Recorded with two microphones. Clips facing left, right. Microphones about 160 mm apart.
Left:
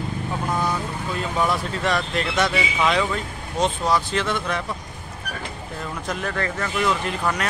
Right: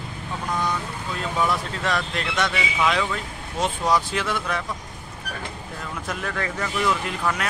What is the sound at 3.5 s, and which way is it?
Speech, 10° right (ahead or behind).